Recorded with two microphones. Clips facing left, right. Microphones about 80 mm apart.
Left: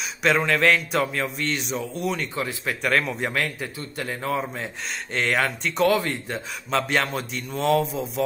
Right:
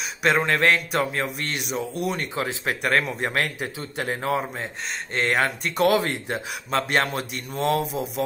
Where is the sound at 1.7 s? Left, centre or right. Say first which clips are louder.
Right 1 dB; centre.